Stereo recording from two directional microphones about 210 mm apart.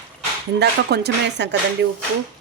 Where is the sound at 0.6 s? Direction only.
50° right (ahead or behind).